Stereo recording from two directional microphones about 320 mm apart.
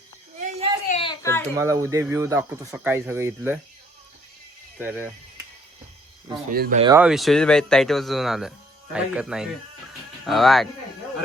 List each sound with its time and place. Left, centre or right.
0.3 s a sound: right
0.9 s a sound: centre
1.5 s speech: centre
4.8 s speech: centre
6.5 s speech: right
6.8 s speech: centre